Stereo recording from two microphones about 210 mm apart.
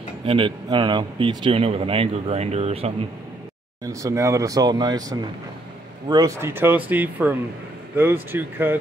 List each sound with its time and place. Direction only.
0.2 s speech: 25° right (ahead or behind)
3.8 s speech: 15° right (ahead or behind)